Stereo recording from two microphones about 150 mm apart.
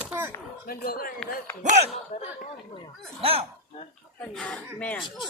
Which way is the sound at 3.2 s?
40° right (ahead or behind).